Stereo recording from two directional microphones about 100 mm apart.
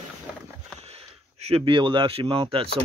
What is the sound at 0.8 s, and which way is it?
Speech, 90° right.